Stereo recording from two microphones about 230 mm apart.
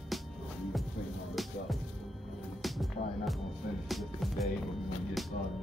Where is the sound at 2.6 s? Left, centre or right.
Centre.